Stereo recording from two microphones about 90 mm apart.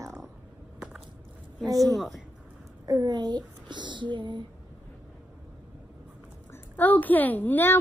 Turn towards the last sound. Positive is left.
turn(degrees=20)  # may be behind; listen again after turning